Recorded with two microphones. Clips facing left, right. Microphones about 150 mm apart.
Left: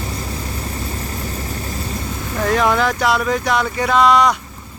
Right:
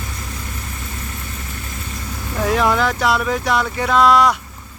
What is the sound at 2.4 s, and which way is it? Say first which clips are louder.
Speech: left 1 dB; centre (ahead or behind).